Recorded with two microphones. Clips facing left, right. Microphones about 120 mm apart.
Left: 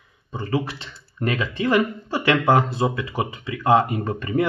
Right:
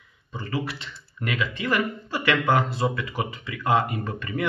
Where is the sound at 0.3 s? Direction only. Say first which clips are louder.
Left 5 dB; 30° left (ahead or behind).